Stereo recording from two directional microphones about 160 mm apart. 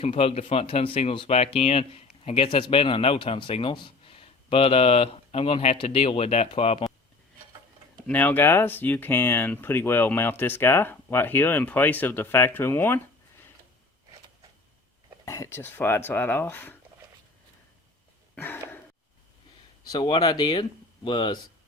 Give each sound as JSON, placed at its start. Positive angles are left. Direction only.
{"t": 0.0, "sound": "speech", "side_deg": 40}
{"t": 8.0, "sound": "speech", "side_deg": 10}
{"t": 15.2, "sound": "speech", "side_deg": 20}
{"t": 18.3, "sound": "a sound", "side_deg": 15}
{"t": 19.8, "sound": "speech", "side_deg": 25}